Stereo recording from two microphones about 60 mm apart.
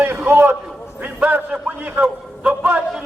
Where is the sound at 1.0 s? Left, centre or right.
Right.